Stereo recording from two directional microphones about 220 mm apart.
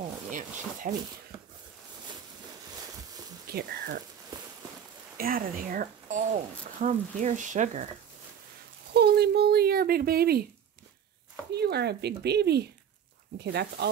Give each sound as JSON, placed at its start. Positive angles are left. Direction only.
{"t": 0.3, "sound": "a sound", "side_deg": -35}
{"t": 3.4, "sound": "speech", "side_deg": -45}
{"t": 5.1, "sound": "speech", "side_deg": -40}
{"t": 8.9, "sound": "speech", "side_deg": -50}
{"t": 11.5, "sound": "speech", "side_deg": -50}